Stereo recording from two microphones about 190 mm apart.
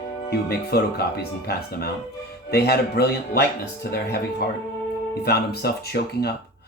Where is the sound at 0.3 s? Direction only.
55° left (ahead or behind).